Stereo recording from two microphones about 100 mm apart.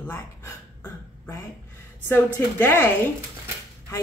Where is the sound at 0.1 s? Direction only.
25° left (ahead or behind).